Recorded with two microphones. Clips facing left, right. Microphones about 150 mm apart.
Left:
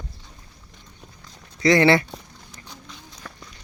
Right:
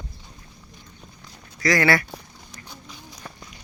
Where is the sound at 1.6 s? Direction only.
25° left (ahead or behind).